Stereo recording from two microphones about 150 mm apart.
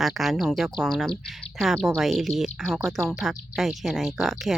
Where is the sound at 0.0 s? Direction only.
Centre (ahead or behind).